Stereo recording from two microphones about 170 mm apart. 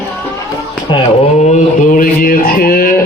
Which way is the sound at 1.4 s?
45° left (ahead or behind).